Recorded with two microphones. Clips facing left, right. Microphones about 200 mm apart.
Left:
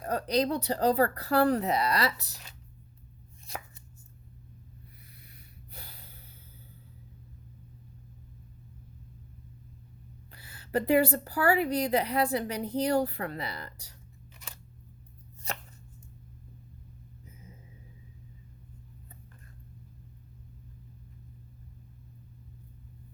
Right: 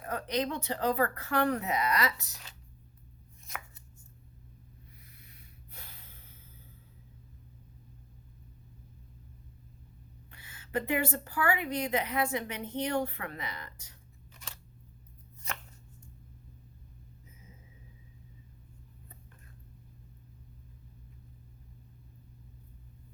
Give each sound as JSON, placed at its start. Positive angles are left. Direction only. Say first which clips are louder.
{"t": 0.0, "sound": "a woman's voice", "louder": "left 5 dB", "side_deg": 40}
{"t": 3.5, "sound": "chopping", "louder": "left 4 dB", "side_deg": 30}
{"t": 5.7, "sound": "snort", "louder": "left 4 dB", "side_deg": 35}
{"t": 10.3, "sound": "a woman's voice", "louder": "left 4 dB", "side_deg": 35}
{"t": 15.5, "sound": "chopping", "louder": "left 3 dB", "side_deg": 35}